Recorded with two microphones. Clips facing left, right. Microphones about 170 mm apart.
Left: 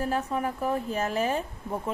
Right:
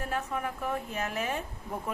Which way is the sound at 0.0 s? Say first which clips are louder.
Left 5 dB; 35° left (ahead or behind).